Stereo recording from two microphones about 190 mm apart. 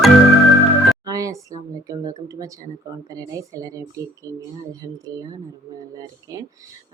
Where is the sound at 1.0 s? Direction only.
15° right (ahead or behind).